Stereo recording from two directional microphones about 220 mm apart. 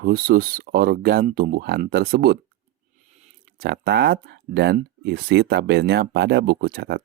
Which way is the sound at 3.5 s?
45° right (ahead or behind).